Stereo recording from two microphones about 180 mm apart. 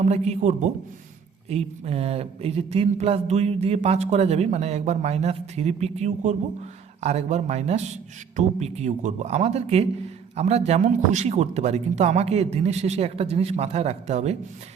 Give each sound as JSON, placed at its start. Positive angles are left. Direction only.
{"t": 0.0, "sound": "speech", "side_deg": -40}